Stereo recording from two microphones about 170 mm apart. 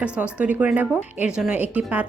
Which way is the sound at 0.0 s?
10° right (ahead or behind).